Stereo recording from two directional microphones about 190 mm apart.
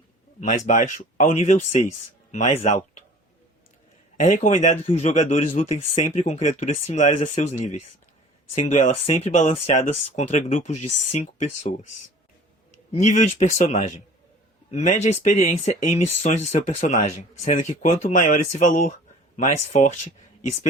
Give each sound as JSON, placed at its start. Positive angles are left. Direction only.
{"t": 0.3, "sound": "speech", "side_deg": 40}
{"t": 2.6, "sound": "speech", "side_deg": 35}
{"t": 4.2, "sound": "speech", "side_deg": 40}